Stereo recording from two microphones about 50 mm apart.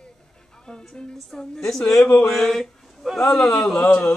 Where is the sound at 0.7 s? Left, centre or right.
Centre.